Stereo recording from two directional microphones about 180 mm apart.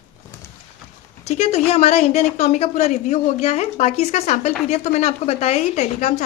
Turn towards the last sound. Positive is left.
turn(degrees=40)  # may be behind; listen again after turning